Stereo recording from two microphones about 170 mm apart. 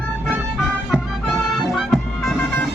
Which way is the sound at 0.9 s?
Centre (ahead or behind).